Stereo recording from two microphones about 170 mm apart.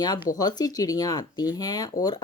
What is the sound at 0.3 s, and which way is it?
Speech, 25° left (ahead or behind).